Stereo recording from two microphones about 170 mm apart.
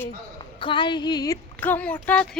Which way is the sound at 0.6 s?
30° left (ahead or behind).